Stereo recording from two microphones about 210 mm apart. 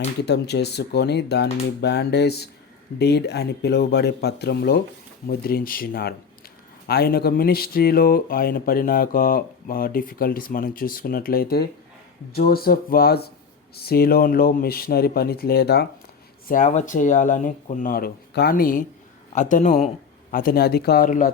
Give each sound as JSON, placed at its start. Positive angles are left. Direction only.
{"t": 0.2, "sound": "speech", "side_deg": 55}
{"t": 16.5, "sound": "speech", "side_deg": 40}